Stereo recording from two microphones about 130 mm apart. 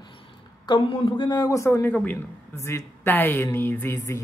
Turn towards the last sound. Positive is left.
turn(degrees=25)  # may be behind; listen again after turning